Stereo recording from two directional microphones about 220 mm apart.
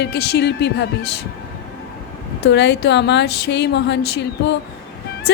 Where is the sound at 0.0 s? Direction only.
50° left (ahead or behind).